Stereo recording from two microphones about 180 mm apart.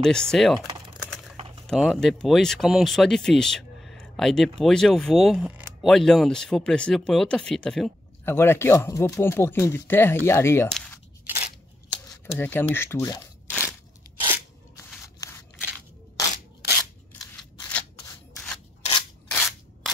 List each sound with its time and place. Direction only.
0.0 s speech: 5° left (ahead or behind)
0.7 s typing: 25° right (ahead or behind)
1.3 s a sound: 30° right (ahead or behind)
1.7 s speech: centre (ahead or behind)
8.3 s speech: 15° left (ahead or behind)
12.1 s speech: 10° left (ahead or behind)
15.2 s scissors: 15° left (ahead or behind)
17.1 s scissors: 5° left (ahead or behind)
18.8 s scissors: 30° left (ahead or behind)
19.3 s scissors: centre (ahead or behind)